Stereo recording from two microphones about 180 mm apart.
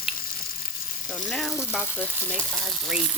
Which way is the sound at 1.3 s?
Centre (ahead or behind).